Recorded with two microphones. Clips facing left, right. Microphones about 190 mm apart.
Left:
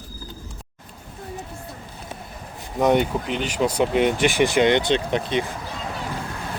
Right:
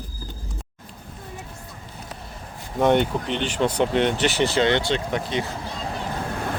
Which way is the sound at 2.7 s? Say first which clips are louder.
Even; 5° left (ahead or behind).